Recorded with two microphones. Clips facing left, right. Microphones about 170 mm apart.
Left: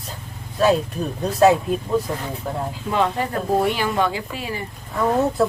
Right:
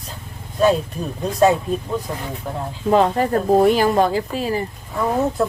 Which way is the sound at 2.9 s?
40° right (ahead or behind).